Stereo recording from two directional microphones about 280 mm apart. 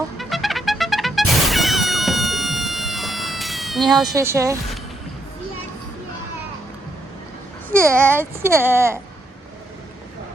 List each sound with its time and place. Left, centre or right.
0.2 s trumpet: centre
4.0 s speech: centre
7.7 s speech: centre